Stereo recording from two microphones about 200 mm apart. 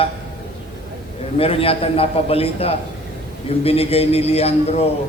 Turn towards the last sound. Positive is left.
turn(degrees=30)  # may be behind; listen again after turning